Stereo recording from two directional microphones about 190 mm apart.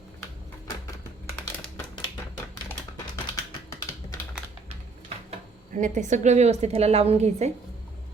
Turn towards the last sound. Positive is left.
turn(degrees=-35)  # may be behind; listen again after turning